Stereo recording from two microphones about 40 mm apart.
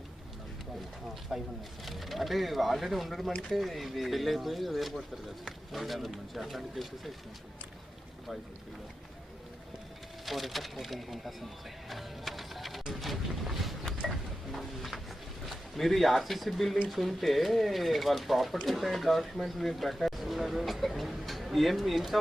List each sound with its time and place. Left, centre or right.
1.3 s speech: centre
1.8 s speech: centre
10.2 s speech: centre
11.9 s music: centre
12.9 s boat: centre
14.1 s a sound: centre
15.4 s speech: centre